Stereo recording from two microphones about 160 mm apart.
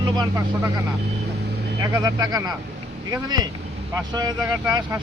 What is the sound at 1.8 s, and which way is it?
Speech, 20° right (ahead or behind).